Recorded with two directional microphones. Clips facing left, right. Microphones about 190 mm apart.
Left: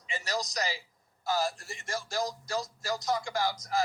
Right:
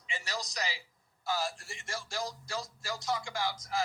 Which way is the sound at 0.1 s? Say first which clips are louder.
Left 5 dB; 40° left (ahead or behind).